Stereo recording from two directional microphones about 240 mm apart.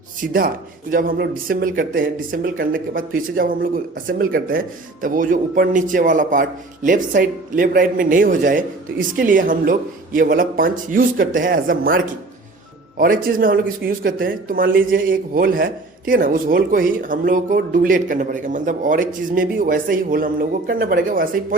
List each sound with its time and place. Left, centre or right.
0.3 s speech: right